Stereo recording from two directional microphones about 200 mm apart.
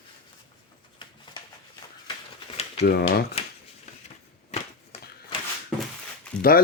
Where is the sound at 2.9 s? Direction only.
50° left (ahead or behind).